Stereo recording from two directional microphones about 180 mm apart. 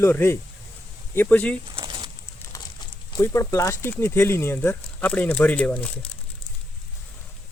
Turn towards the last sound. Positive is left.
turn(degrees=5)  # may be behind; listen again after turning